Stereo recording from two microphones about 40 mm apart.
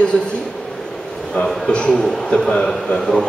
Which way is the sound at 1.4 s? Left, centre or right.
Left.